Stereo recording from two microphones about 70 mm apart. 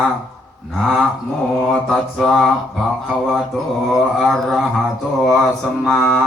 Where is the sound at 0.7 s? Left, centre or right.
Centre.